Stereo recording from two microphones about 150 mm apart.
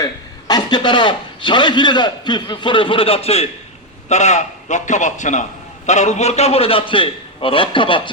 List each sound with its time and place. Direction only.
0.0 s a man's voice: 25° left (ahead or behind)